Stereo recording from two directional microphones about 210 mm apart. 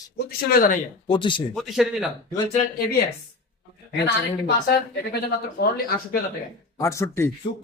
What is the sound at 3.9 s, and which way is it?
Speech, 50° left (ahead or behind).